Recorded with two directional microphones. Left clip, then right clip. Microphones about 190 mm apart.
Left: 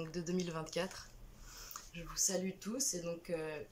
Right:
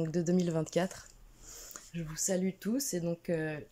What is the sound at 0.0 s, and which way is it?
Speech, 35° right (ahead or behind).